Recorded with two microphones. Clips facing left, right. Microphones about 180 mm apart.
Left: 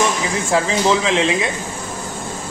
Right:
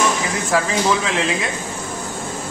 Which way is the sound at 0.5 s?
20° left (ahead or behind).